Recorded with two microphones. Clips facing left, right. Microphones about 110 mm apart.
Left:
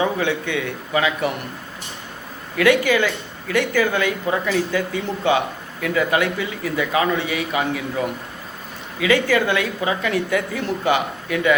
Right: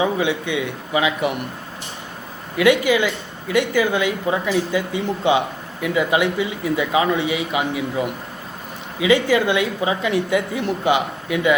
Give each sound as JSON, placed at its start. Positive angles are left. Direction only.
{"t": 0.0, "sound": "speech", "side_deg": -15}
{"t": 2.6, "sound": "speech", "side_deg": -15}